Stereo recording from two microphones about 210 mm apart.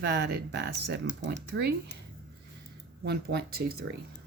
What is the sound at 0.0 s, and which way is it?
Speech, 50° right (ahead or behind).